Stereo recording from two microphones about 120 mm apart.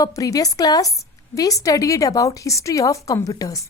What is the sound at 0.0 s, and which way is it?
A woman's voice, 30° left (ahead or behind).